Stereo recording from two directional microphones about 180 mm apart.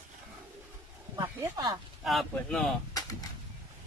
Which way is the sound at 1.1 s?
20° right (ahead or behind).